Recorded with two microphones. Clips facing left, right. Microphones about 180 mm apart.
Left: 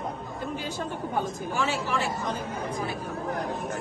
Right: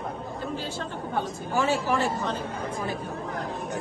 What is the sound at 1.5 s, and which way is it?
Speech, 40° right (ahead or behind).